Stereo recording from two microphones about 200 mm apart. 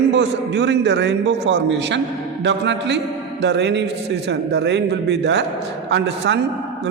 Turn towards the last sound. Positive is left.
turn(degrees=-60)  # may be behind; listen again after turning